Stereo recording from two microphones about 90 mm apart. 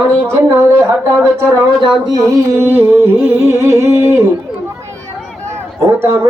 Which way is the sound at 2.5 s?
25° right (ahead or behind).